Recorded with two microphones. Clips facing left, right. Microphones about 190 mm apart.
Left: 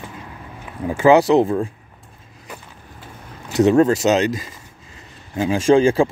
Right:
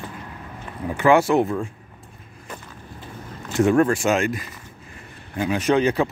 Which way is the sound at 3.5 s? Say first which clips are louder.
Left 4 dB; 20° left (ahead or behind).